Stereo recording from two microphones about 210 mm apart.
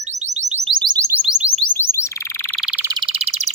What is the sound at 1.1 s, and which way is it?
Music, 5° right (ahead or behind).